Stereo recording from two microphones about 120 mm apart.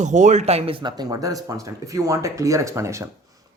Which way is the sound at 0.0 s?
85° right.